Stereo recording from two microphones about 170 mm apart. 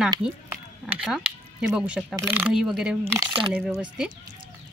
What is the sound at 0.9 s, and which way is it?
Speech, centre (ahead or behind).